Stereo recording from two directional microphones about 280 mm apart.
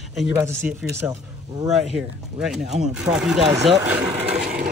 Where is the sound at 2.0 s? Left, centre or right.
Centre.